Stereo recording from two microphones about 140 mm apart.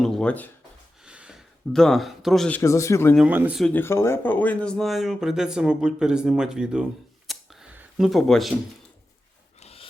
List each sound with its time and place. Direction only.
0.0 s speech: 5° left (ahead or behind)
1.0 s a sound: 5° right (ahead or behind)
1.7 s speech: 5° left (ahead or behind)
2.5 s speech: 20° left (ahead or behind)
3.2 s speech: 10° right (ahead or behind)
3.6 s speech: 15° left (ahead or behind); by 6.8 s 5° right (ahead or behind)
7.3 s camera: 5° right (ahead or behind)
9.6 s rub: 45° left (ahead or behind)